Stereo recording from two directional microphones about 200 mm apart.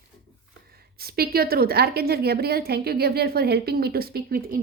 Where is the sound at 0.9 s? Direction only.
50° right (ahead or behind).